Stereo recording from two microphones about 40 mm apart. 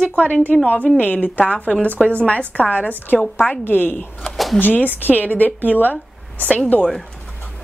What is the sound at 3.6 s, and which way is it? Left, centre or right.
A woman's voice, left.